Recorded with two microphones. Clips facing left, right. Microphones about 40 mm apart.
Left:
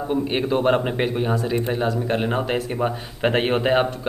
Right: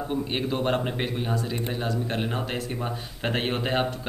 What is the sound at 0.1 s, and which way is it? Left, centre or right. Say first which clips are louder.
Speech: left 8 dB; centre.